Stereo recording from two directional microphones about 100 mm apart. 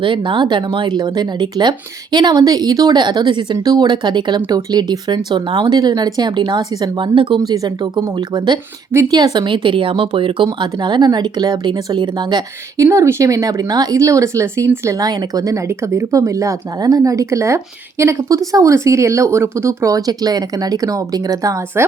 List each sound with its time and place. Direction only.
0.0 s speech: 55° right (ahead or behind)
12.7 s speech: 30° right (ahead or behind)